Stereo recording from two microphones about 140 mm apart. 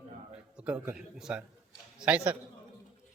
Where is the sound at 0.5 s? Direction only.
10° right (ahead or behind).